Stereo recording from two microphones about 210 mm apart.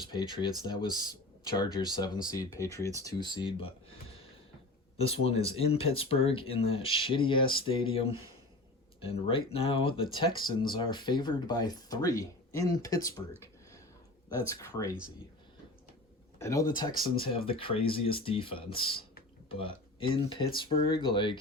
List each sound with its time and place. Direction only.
0.1 s speech: 20° left (ahead or behind)
5.5 s speech: 25° left (ahead or behind)
14.3 s speech: 15° left (ahead or behind)
16.4 s speech: 15° left (ahead or behind)